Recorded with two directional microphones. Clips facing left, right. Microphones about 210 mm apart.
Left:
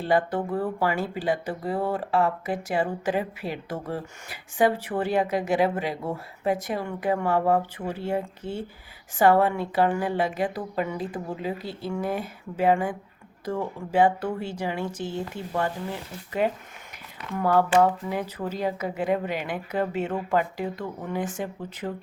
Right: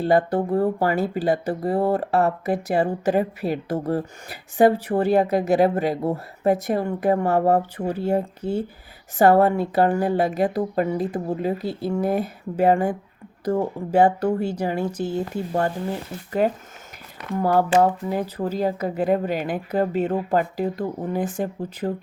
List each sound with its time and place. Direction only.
0.0 s speech: 40° right (ahead or behind)